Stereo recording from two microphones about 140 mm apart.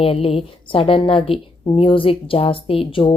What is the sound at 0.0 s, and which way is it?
A woman's voice, 40° left (ahead or behind).